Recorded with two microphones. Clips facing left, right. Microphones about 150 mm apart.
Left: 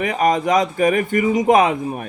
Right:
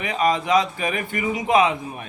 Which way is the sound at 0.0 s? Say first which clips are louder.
Left 4 dB; 45° left (ahead or behind).